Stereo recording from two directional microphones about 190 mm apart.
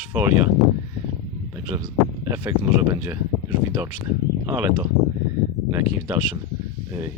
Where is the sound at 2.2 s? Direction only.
15° right (ahead or behind).